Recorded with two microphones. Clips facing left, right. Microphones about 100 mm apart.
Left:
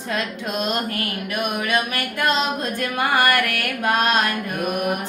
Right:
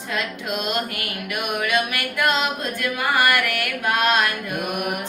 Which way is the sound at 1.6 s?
40° left (ahead or behind).